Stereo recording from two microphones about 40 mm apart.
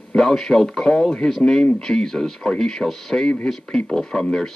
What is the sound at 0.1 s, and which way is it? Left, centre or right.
Speech, centre.